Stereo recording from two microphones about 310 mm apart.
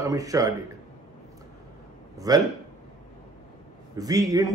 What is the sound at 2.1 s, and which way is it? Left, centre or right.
Speech, centre.